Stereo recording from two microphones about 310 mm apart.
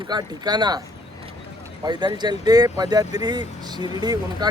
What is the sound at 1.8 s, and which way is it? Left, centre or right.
Speech, centre.